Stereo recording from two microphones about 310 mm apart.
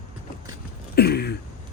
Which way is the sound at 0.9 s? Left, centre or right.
Left.